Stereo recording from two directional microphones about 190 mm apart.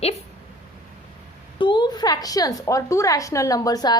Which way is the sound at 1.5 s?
25° left (ahead or behind).